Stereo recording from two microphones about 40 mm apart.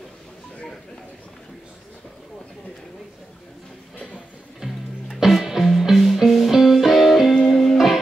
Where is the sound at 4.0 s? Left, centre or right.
Left.